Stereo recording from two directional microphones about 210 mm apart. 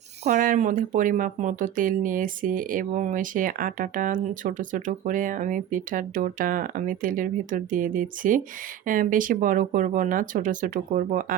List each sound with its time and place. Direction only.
0.3 s speech: 40° right (ahead or behind)